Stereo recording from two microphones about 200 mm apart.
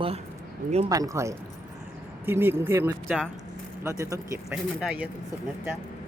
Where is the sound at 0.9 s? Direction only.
15° right (ahead or behind).